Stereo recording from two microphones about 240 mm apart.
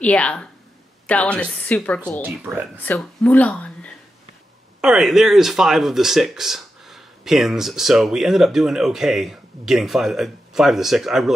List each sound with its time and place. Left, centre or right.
0.0 s speech: centre
2.2 s speech: centre
2.8 s speech: centre